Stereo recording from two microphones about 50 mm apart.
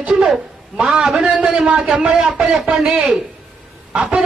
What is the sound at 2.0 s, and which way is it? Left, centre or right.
Speech, right.